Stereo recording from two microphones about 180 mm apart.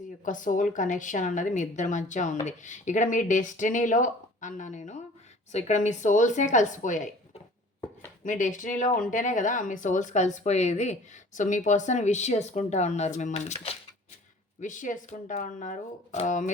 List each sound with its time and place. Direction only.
0.3 s speech: 45° left (ahead or behind)
8.2 s speech: 45° left (ahead or behind)